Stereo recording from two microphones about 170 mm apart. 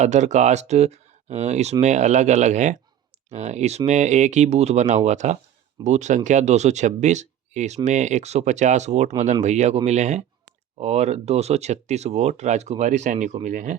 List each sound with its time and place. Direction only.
0.0 s speech: 45° right (ahead or behind)